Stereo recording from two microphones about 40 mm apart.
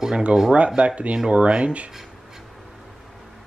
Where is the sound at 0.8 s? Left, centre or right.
Right.